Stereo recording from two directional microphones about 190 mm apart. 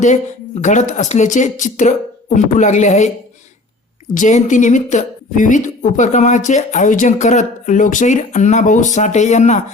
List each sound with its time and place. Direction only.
0.6 s a woman's voice: 40° left (ahead or behind)
4.1 s a woman's voice: 40° left (ahead or behind)